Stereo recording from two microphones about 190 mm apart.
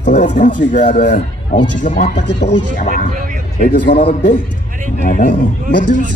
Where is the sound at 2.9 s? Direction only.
45° right (ahead or behind).